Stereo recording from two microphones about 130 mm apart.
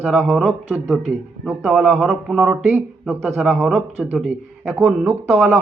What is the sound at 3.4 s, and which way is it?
A man's voice, centre (ahead or behind).